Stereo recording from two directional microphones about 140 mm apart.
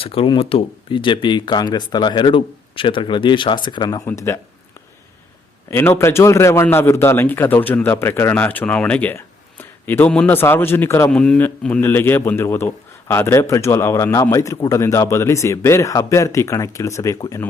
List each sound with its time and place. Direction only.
0.0 s speech: 40° left (ahead or behind)
5.7 s a man's voice: 20° left (ahead or behind)
11.1 s speech: 5° left (ahead or behind); by 17.4 s 25° left (ahead or behind)